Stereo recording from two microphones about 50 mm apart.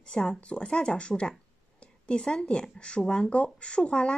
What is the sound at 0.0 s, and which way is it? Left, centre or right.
A woman's voice, centre.